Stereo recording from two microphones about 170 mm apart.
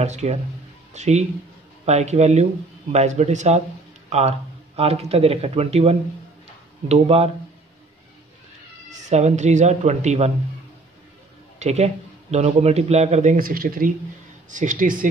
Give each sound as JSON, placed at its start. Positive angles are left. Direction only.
{"t": 0.0, "sound": "a man's voice", "side_deg": -40}
{"t": 8.9, "sound": "a man's voice", "side_deg": -40}
{"t": 11.6, "sound": "a man's voice", "side_deg": -40}